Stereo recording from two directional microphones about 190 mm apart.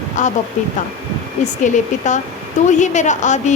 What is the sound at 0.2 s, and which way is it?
Speech, 40° left (ahead or behind).